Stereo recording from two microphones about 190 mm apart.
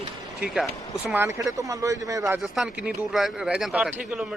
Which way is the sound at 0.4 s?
Centre (ahead or behind).